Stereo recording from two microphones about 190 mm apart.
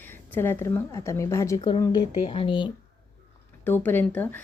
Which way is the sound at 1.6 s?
25° left (ahead or behind).